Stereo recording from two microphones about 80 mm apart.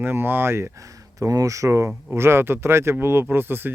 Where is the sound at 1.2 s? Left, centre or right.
Right.